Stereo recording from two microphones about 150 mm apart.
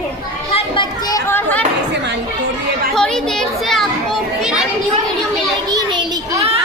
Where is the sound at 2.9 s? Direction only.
5° left (ahead or behind).